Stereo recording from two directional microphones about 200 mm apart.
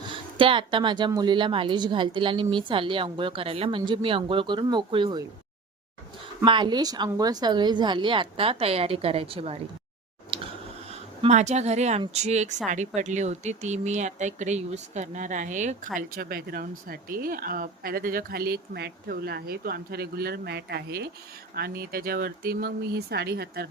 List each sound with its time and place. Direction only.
0.1 s a woman's voice: 25° right (ahead or behind)
6.4 s a woman's voice: 25° right (ahead or behind)
10.3 s a sound: 25° right (ahead or behind)
10.9 s speech: 35° right (ahead or behind); by 23.6 s 55° right (ahead or behind)